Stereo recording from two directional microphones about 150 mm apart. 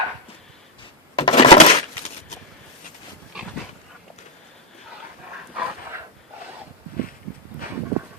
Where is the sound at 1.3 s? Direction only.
50° left (ahead or behind).